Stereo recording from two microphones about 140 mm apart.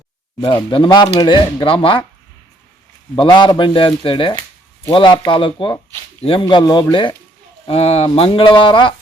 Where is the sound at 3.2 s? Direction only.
35° left (ahead or behind).